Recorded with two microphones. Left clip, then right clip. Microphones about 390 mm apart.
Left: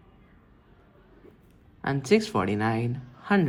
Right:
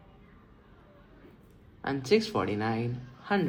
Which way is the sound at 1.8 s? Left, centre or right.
Left.